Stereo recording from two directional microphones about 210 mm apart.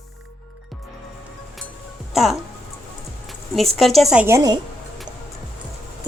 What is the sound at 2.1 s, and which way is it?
Music, centre (ahead or behind).